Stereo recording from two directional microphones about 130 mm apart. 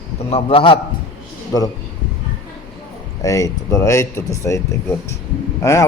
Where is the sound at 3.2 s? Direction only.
25° left (ahead or behind).